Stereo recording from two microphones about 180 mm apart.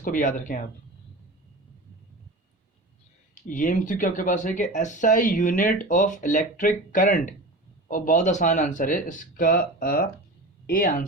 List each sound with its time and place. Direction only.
0.0 s speech: 45° left (ahead or behind)
3.5 s speech: 45° left (ahead or behind)